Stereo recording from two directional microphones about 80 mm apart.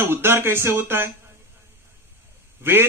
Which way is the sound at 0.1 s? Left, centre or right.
Right.